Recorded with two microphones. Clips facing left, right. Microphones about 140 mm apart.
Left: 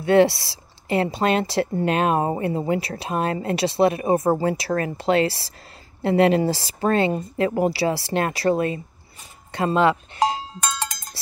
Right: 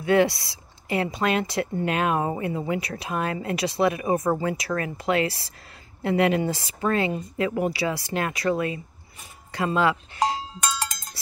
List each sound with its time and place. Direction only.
0.0 s a woman's voice: 30° left (ahead or behind)